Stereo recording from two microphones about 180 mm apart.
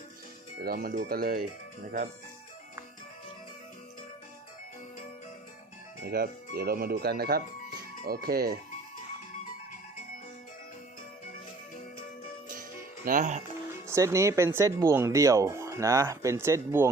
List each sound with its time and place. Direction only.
0.6 s speech: 55° right (ahead or behind)
6.1 s speech: 60° right (ahead or behind)
13.1 s speech: 45° right (ahead or behind)
13.8 s speech: 15° right (ahead or behind)